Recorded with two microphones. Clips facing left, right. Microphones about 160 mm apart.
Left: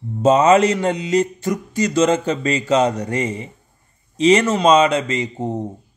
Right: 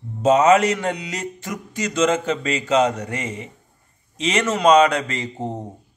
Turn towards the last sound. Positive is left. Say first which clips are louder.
# left 5 dB
turn(degrees=20)  # may be behind; listen again after turning